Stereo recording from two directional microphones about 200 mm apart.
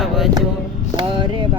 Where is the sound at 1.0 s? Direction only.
25° right (ahead or behind).